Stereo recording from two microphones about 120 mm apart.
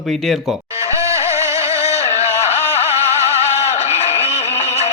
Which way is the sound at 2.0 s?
65° left (ahead or behind).